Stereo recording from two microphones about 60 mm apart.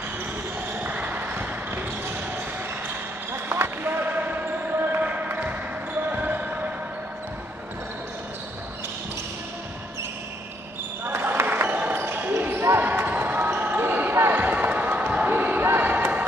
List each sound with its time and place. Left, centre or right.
0.8 s basketball bounce: right
3.4 s basketball bounce: right
11.1 s a sound: right
11.9 s basketball bounce: right
13.0 s basketball bounce: right
14.1 s basketball bounce: right
14.4 s basketball bounce: right